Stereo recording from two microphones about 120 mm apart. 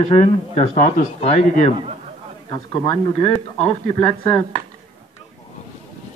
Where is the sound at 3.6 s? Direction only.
60° left (ahead or behind).